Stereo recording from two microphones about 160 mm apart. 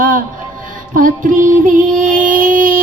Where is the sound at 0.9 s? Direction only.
55° right (ahead or behind).